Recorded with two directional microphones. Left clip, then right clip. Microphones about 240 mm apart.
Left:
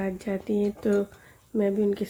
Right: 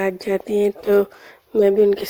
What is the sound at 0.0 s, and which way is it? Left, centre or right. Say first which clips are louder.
Speech: right 10 dB; right.